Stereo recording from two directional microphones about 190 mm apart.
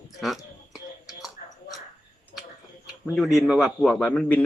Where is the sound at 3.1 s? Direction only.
Centre (ahead or behind).